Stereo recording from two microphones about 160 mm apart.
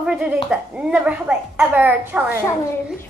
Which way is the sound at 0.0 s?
5° right (ahead or behind).